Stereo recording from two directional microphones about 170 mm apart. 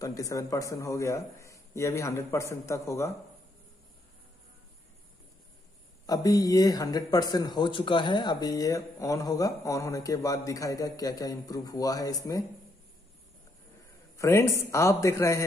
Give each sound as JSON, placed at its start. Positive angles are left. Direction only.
{"t": 0.0, "sound": "a man's voice", "side_deg": 20}
{"t": 6.0, "sound": "speech", "side_deg": 20}
{"t": 14.1, "sound": "a man's voice", "side_deg": 15}